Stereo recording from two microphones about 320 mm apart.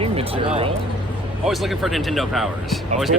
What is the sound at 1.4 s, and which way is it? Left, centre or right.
Speech, centre.